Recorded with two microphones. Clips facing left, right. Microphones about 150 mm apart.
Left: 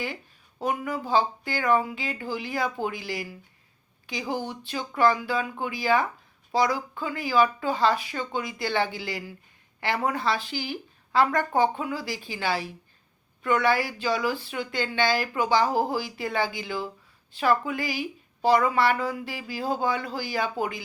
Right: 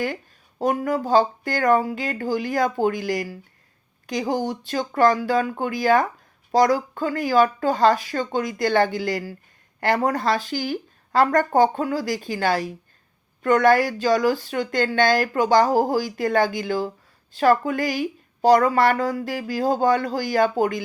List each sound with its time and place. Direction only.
0.6 s speech: 40° right (ahead or behind)